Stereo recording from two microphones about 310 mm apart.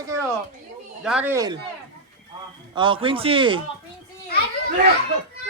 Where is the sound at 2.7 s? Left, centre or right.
Centre.